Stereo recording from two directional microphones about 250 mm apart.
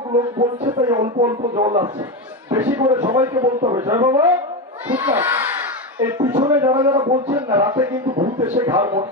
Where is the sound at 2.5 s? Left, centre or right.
Centre.